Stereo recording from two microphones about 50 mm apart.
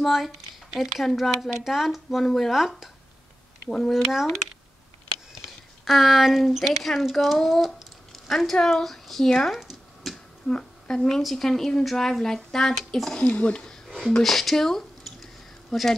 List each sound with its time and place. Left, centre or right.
0.0 s speech: centre
3.6 s speech: centre
3.9 s speech: centre
5.9 s speech: centre
9.6 s a sound: centre
10.9 s speech: centre
13.2 s speech: left
13.7 s a sound: centre
14.2 s speech: centre